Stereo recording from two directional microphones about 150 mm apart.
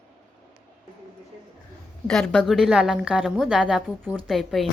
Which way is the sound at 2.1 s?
Centre (ahead or behind).